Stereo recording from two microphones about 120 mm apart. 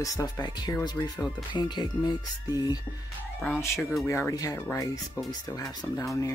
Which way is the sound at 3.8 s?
Centre (ahead or behind).